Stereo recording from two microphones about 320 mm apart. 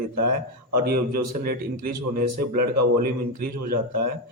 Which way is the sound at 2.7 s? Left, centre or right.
Right.